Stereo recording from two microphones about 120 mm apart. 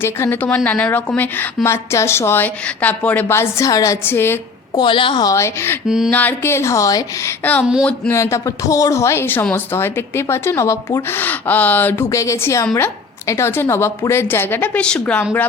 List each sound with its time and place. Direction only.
0.0 s a woman's voice: 20° left (ahead or behind)
4.0 s a woman's voice: 20° left (ahead or behind)
4.7 s a woman's voice: 40° left (ahead or behind)
5.2 s a woman's voice: 25° left (ahead or behind)
7.6 s speech: 5° right (ahead or behind)
8.1 s a woman's voice: 25° left (ahead or behind)